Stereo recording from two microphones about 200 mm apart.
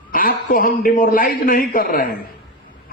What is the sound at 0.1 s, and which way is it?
A man's voice, 45° left (ahead or behind).